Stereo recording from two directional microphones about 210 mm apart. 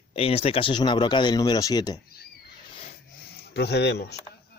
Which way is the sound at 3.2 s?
50° left (ahead or behind).